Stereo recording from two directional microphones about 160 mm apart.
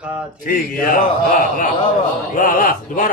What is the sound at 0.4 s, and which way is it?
Speech, 60° left (ahead or behind).